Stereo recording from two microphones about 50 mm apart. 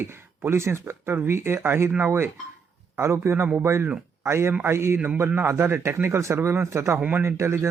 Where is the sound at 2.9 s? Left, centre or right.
Right.